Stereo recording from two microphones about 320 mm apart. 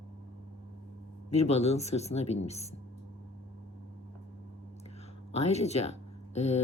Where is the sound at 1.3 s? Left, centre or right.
Centre.